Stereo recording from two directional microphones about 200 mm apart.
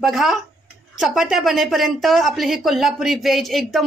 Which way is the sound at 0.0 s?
Centre (ahead or behind).